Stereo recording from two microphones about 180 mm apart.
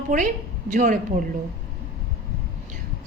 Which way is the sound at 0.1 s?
45° right (ahead or behind).